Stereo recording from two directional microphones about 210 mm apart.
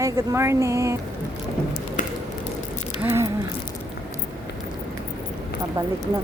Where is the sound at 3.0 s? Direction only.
10° right (ahead or behind).